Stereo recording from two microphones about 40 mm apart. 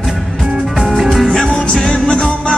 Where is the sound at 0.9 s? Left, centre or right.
Centre.